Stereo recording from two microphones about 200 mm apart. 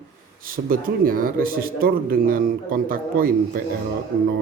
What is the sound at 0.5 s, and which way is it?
Speech, 45° right (ahead or behind).